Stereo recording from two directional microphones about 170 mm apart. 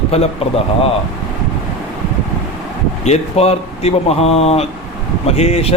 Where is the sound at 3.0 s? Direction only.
40° left (ahead or behind).